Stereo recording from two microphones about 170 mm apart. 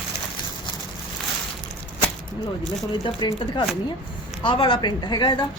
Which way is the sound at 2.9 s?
30° left (ahead or behind).